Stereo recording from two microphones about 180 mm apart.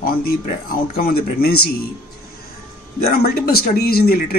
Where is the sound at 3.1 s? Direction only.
60° left (ahead or behind).